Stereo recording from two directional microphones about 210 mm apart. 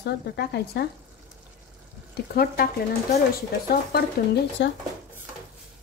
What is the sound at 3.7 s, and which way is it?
Speech, 45° left (ahead or behind).